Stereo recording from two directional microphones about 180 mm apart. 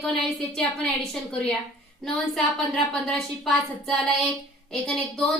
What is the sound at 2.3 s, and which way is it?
Speech, 5° left (ahead or behind).